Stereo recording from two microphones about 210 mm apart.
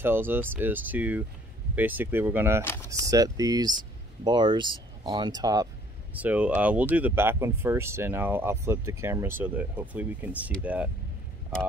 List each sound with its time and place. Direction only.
0.0 s speech: 10° right (ahead or behind)
2.6 s speech: 10° left (ahead or behind)
3.1 s speech: 15° right (ahead or behind)
6.1 s speech: 5° right (ahead or behind)